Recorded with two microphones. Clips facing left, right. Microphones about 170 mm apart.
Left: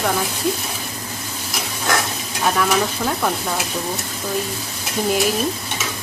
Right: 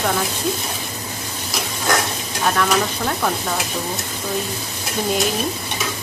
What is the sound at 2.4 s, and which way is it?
Stir, 5° left (ahead or behind).